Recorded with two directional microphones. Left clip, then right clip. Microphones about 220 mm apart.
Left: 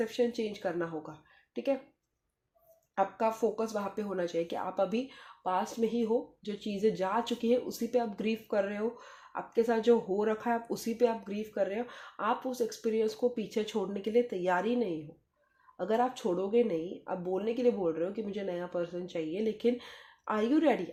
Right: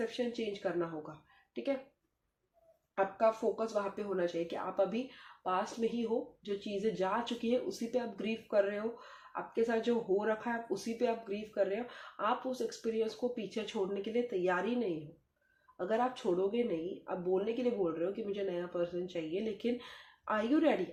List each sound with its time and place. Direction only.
0.2 s speech: 30° left (ahead or behind)
2.9 s speech: 35° left (ahead or behind)
15.8 s speech: 30° left (ahead or behind)